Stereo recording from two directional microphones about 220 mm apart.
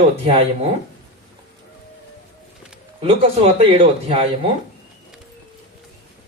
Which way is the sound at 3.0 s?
25° right (ahead or behind).